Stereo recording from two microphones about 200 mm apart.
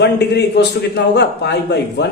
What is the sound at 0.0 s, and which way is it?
Speech, 60° left (ahead or behind).